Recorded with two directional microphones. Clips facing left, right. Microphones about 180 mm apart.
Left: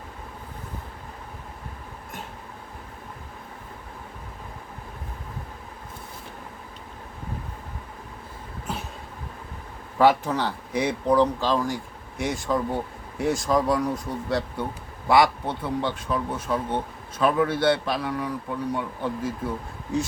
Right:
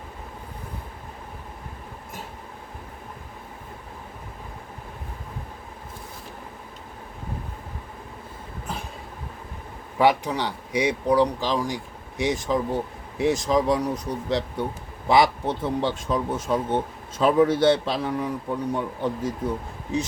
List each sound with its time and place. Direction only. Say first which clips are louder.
10.0 s speech: left 1 dB; 15° right (ahead or behind)